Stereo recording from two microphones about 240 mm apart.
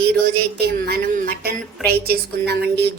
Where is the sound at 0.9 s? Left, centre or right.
Right.